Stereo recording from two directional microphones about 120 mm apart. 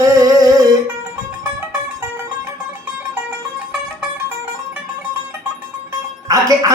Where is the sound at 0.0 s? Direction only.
30° right (ahead or behind).